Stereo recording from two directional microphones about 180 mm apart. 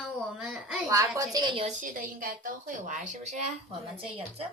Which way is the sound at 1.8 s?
50° right (ahead or behind).